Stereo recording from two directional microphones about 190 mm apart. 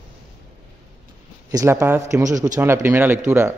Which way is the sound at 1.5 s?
20° right (ahead or behind).